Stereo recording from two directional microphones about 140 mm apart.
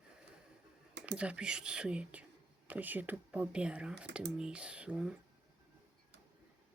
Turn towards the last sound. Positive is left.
turn(degrees=-5)  # may be behind; listen again after turning